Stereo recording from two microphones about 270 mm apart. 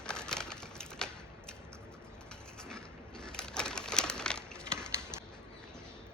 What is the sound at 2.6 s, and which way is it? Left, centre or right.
Crushing, centre.